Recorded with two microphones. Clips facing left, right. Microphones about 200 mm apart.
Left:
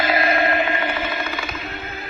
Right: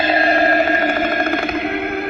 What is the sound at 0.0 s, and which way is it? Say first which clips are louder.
Music: right 4 dB; 30° right (ahead or behind).